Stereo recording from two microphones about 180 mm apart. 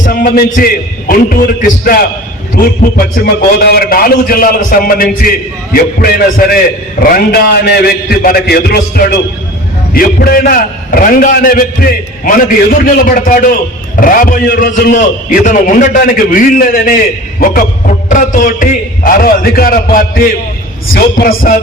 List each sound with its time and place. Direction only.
0.0 s a man's voice: 50° left (ahead or behind)
3.6 s a man's voice: 60° left (ahead or behind)
9.9 s a man's voice: 55° left (ahead or behind)